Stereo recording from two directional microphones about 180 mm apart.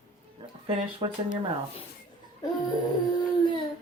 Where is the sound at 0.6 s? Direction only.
30° right (ahead or behind).